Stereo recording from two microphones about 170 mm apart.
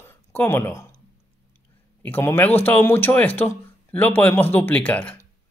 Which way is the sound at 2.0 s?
10° left (ahead or behind).